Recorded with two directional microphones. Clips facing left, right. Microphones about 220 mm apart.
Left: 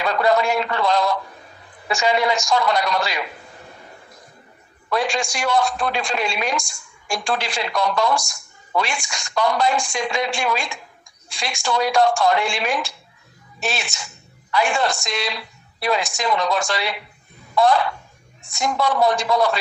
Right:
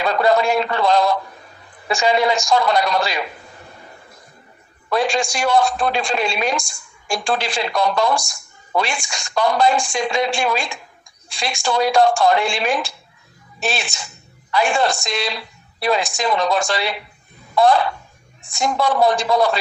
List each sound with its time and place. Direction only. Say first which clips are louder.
0.0 s speech: right 2 dB; 30° right (ahead or behind)
4.8 s speech: right 3 dB; 30° right (ahead or behind)